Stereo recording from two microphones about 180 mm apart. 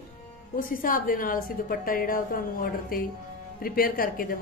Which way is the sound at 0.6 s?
50° left (ahead or behind).